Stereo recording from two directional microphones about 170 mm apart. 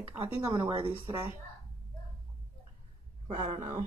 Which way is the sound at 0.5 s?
30° right (ahead or behind).